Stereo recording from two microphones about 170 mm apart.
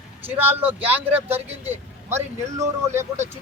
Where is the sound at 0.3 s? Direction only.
10° right (ahead or behind).